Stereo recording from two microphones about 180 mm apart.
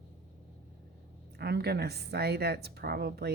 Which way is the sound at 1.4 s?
65° right (ahead or behind).